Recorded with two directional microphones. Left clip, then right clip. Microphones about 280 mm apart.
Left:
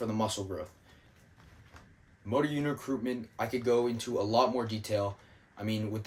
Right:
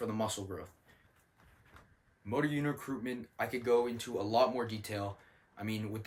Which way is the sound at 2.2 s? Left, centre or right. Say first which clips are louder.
Left 4 dB; centre.